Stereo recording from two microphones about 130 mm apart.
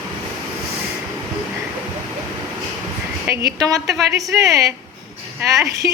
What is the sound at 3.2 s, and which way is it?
Speech, 25° right (ahead or behind).